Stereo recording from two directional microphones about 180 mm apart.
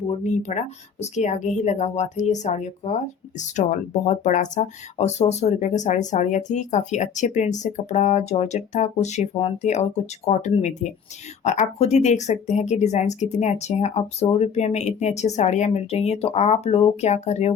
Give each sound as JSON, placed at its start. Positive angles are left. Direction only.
{"t": 0.1, "sound": "speech", "side_deg": 40}